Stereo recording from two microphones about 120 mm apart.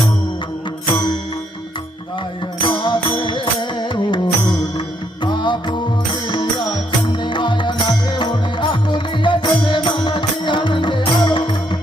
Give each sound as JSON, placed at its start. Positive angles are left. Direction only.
{"t": 2.6, "sound": "music", "side_deg": 45}